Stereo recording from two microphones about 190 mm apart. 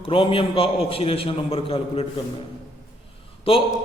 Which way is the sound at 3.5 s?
30° left (ahead or behind).